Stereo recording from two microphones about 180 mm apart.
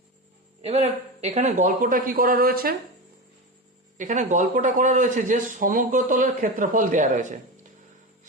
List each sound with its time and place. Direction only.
0.6 s speech: 40° right (ahead or behind); by 2.7 s 55° right (ahead or behind)
3.9 s speech: 40° right (ahead or behind)